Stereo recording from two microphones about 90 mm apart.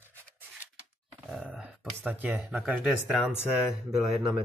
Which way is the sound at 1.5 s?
Centre (ahead or behind).